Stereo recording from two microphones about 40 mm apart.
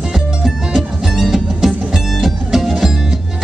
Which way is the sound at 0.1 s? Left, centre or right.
Centre.